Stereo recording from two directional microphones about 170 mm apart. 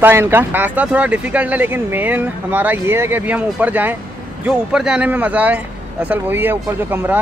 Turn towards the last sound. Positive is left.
turn(degrees=-10)  # may be behind; listen again after turning